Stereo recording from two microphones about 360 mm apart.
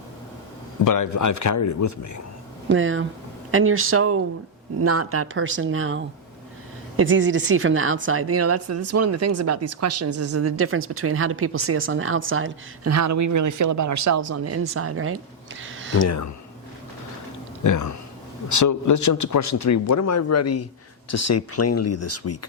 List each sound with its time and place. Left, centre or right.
0.9 s a man's voice: left
2.6 s a woman's voice: right
15.6 s a sound: right
15.9 s a man's voice: left
17.6 s a man's voice: left